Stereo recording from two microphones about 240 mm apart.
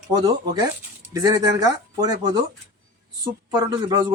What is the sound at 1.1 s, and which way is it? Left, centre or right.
Speech, centre.